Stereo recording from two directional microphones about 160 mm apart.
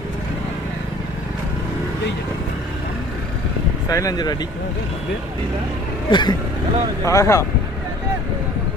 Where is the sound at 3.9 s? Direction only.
25° left (ahead or behind).